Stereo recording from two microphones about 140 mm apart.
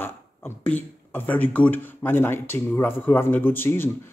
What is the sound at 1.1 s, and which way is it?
Speech, 10° left (ahead or behind).